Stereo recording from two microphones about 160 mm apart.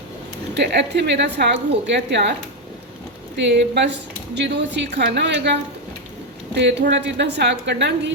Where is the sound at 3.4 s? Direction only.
90° right.